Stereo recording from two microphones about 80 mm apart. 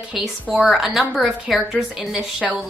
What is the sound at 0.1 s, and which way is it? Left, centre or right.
A woman's voice, centre.